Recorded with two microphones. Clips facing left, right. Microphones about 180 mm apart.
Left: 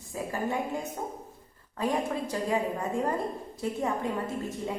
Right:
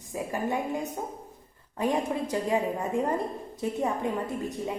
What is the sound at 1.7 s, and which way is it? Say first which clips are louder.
A woman's voice: right 2 dB; 20° right (ahead or behind).